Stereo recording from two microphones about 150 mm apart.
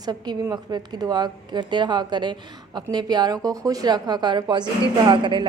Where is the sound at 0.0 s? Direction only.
25° right (ahead or behind).